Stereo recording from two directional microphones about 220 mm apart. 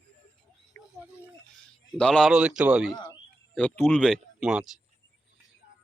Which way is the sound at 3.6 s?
10° left (ahead or behind).